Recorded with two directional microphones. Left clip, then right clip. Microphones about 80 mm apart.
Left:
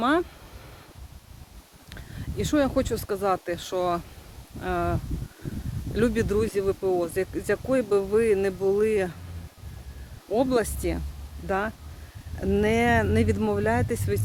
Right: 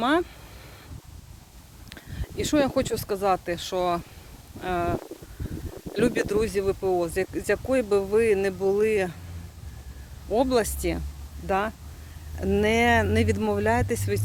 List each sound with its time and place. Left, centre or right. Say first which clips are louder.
0.0 s speech: even; centre
1.9 s speech: even; centre
3.6 s speech: right 1 dB; centre
10.3 s speech: right 1 dB; centre
12.5 s speech: right 1 dB; centre
13.6 s speech: right 1 dB; centre